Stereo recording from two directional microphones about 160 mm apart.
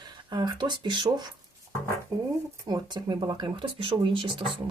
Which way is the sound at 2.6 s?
25° right (ahead or behind).